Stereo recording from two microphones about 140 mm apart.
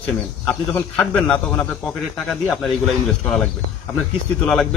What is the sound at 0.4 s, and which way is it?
Speech, 15° left (ahead or behind).